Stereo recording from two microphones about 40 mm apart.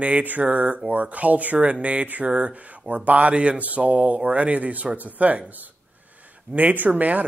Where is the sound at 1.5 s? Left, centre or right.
Right.